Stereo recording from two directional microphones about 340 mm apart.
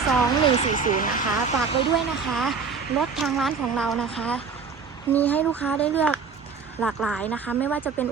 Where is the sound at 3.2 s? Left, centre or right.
Centre.